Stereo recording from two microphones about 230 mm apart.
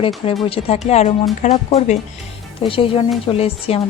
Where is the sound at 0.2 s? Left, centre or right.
Left.